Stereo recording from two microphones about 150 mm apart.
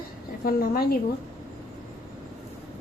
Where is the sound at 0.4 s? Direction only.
80° left.